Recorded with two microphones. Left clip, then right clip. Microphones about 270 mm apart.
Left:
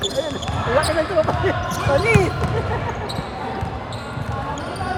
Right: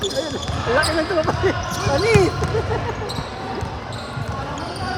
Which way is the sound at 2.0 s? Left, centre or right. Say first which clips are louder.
Right 4 dB; right.